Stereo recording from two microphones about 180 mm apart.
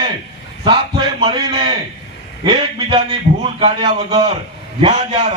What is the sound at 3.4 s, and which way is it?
A man's voice, 30° right (ahead or behind).